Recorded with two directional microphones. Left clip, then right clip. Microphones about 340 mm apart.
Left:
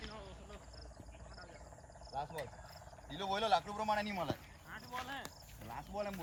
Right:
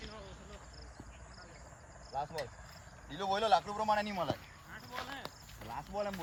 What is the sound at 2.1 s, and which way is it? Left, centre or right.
Speech, centre.